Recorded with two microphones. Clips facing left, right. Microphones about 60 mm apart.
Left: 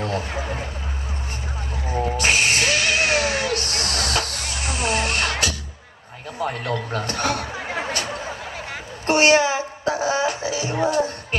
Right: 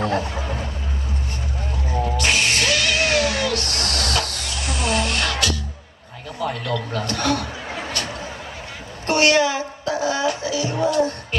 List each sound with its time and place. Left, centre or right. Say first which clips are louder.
0.0 s speech: right 3 dB; right
0.3 s vehicle: even; left
1.9 s a sound: left 1 dB; left
9.0 s music: left 1 dB; left